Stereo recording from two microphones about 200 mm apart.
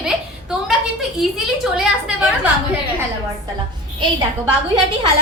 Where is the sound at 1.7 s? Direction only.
Centre (ahead or behind).